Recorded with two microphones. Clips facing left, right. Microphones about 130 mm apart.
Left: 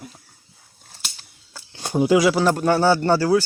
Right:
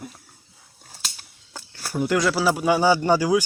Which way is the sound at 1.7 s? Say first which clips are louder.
Left 5 dB; 20° left (ahead or behind).